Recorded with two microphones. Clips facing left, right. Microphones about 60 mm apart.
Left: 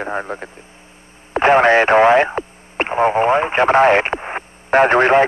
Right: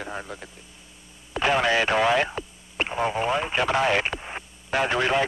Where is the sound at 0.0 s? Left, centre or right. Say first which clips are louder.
Left 10 dB; left.